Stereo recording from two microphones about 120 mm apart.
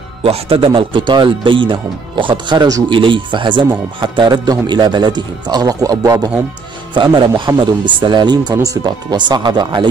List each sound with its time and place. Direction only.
0.2 s speech: 50° right (ahead or behind); by 6.3 s 30° right (ahead or behind)
6.9 s speech: 40° right (ahead or behind)